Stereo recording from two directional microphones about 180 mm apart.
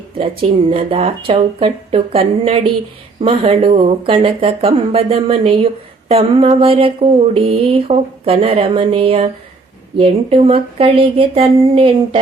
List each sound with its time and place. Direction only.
0.4 s speech: 30° right (ahead or behind)